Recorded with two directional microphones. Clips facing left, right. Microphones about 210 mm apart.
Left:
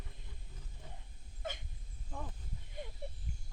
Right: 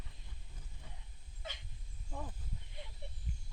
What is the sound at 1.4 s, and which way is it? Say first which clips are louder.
Dog: left 6 dB; 50° left (ahead or behind).